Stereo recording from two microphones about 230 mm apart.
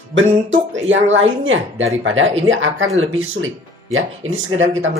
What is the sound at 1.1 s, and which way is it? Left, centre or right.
Speech, right.